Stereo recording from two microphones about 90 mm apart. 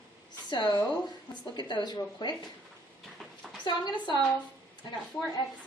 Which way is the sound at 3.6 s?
60° left (ahead or behind).